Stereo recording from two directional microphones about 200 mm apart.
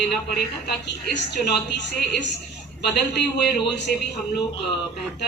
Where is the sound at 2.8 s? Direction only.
55° left (ahead or behind).